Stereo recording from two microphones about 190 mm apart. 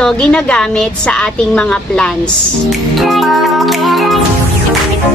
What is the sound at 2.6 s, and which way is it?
Music, centre (ahead or behind).